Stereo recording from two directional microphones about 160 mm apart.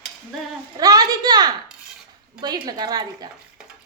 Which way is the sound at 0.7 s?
25° right (ahead or behind).